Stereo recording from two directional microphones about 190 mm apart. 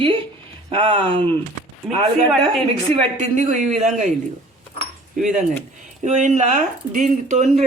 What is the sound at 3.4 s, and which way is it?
Speech, 40° right (ahead or behind).